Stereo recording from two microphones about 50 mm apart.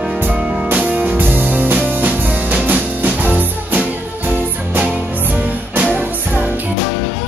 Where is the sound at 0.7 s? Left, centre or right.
Right.